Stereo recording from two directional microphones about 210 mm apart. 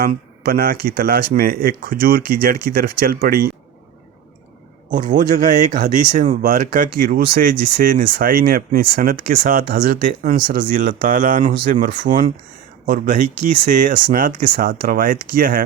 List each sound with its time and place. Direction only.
0.0 s speech: 45° right (ahead or behind)
4.9 s speech: 35° right (ahead or behind)